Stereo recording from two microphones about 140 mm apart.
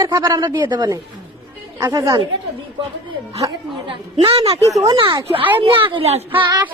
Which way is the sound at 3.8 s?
40° right (ahead or behind).